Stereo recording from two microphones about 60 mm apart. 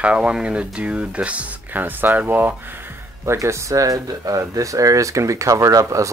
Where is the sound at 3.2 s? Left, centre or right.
Right.